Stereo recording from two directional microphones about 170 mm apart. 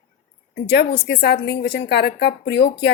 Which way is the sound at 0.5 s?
75° left (ahead or behind).